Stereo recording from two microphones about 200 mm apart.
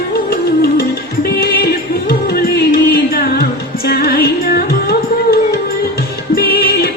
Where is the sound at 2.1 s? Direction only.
50° left (ahead or behind).